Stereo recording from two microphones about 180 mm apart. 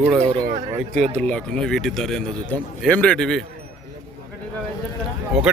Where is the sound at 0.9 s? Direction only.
40° right (ahead or behind).